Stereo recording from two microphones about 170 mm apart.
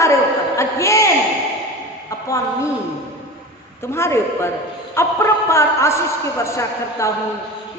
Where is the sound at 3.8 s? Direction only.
15° left (ahead or behind).